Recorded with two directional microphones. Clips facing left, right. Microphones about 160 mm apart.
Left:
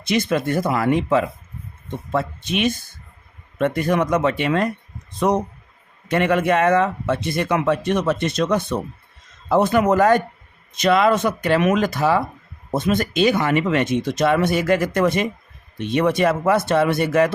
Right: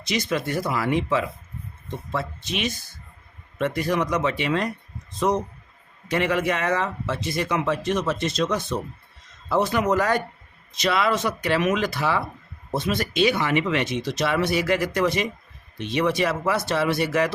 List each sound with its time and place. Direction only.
0.0 s speech: 55° left (ahead or behind)
6.1 s speech: 55° left (ahead or behind)